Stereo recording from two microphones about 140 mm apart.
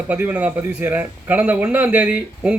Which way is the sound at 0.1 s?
10° right (ahead or behind).